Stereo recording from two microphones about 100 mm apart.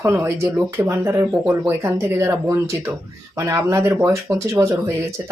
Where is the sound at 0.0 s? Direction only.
25° right (ahead or behind).